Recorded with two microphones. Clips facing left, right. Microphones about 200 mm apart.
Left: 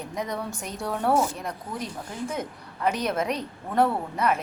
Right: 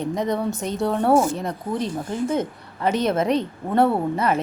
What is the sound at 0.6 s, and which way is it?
Speech, 25° right (ahead or behind).